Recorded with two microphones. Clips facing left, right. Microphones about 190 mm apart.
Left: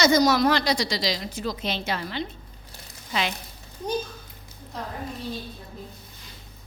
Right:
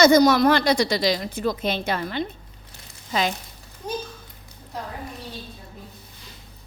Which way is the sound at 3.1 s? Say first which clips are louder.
Right 4 dB; 40° right (ahead or behind).